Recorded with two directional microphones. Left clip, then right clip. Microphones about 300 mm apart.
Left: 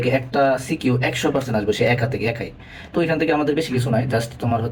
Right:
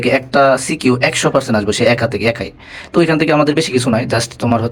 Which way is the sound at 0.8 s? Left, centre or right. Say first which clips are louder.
Right 7 dB; right.